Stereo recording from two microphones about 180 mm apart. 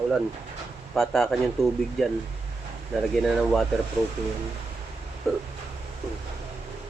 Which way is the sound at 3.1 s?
Centre (ahead or behind).